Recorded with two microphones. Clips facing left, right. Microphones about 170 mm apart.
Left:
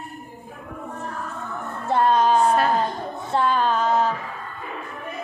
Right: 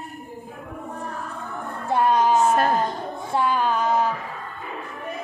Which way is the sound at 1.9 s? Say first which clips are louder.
Left 1 dB; 15° right (ahead or behind).